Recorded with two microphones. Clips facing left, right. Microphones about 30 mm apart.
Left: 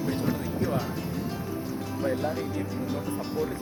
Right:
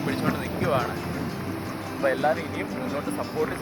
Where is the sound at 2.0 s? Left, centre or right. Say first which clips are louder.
Right 5 dB; right.